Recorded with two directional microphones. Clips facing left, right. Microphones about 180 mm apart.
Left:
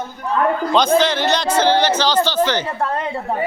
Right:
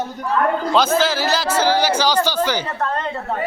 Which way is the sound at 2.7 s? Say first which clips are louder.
Left 1 dB; 10° left (ahead or behind).